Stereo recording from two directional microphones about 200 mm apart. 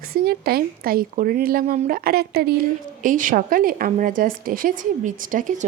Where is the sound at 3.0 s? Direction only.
40° right (ahead or behind).